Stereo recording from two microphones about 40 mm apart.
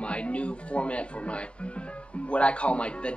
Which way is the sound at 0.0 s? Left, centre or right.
Left.